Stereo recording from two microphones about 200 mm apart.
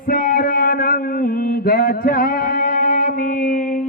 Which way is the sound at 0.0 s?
45° left (ahead or behind).